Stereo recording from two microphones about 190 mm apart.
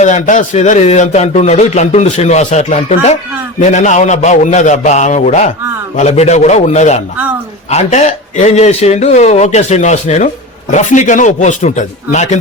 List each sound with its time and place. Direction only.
0.0 s speech: 40° left (ahead or behind)